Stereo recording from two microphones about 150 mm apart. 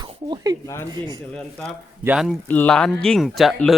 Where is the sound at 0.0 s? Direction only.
30° right (ahead or behind).